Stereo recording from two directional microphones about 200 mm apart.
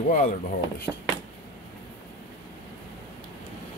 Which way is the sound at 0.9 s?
Centre (ahead or behind).